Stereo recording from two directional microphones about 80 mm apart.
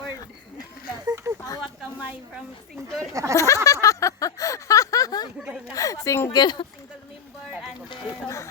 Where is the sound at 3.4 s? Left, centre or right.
Left.